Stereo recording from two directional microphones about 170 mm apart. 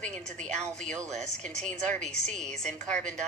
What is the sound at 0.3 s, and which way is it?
Speech, 45° right (ahead or behind).